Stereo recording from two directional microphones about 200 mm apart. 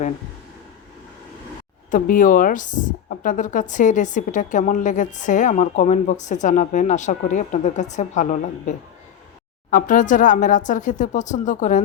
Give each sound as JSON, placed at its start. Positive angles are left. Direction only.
{"t": 1.9, "sound": "speech", "side_deg": 40}